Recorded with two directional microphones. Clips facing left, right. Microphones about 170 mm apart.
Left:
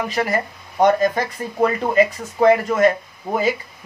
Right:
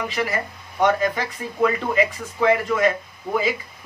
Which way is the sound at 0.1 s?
40° left (ahead or behind).